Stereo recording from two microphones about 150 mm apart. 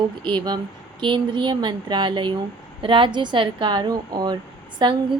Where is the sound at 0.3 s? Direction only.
30° right (ahead or behind).